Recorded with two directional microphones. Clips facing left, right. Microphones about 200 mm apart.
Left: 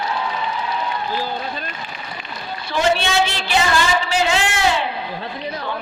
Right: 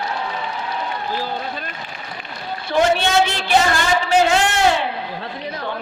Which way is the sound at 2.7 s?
50° right (ahead or behind).